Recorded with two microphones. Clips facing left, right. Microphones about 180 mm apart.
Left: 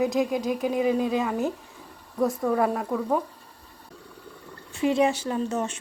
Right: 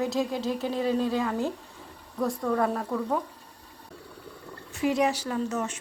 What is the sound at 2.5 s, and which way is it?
Speech, 10° left (ahead or behind).